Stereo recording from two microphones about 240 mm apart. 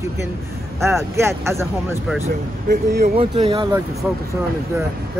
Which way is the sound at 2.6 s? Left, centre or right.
Right.